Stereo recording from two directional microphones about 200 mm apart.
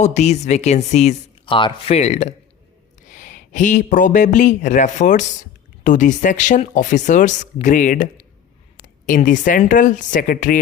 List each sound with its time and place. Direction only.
0.0 s speech: 35° left (ahead or behind)